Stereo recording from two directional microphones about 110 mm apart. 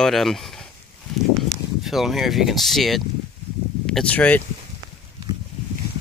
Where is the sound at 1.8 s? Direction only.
Centre (ahead or behind); by 4.4 s 15° left (ahead or behind).